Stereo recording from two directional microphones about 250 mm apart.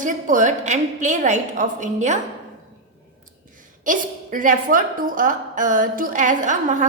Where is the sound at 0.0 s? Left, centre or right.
Right.